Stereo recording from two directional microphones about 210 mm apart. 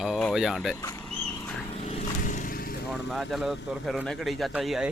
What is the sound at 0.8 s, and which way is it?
Speech, 15° left (ahead or behind).